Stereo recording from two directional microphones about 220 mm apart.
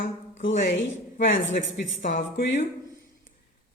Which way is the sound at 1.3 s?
60° left (ahead or behind).